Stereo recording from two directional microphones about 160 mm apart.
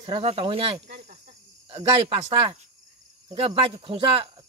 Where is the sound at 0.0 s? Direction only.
35° right (ahead or behind).